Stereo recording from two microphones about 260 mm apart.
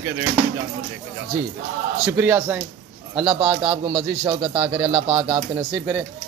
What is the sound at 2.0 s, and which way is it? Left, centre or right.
Speech, centre.